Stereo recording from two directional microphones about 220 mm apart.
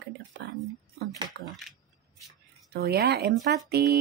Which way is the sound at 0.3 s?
50° right (ahead or behind).